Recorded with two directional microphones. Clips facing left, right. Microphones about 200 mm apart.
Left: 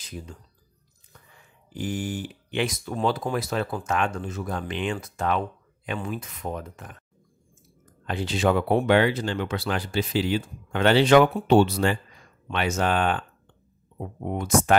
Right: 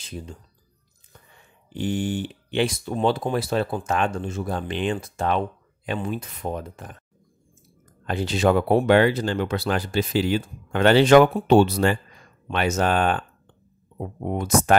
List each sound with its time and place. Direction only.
0.0 s speech: 25° right (ahead or behind)
1.7 s speech: 25° right (ahead or behind)
8.0 s speech: 40° right (ahead or behind)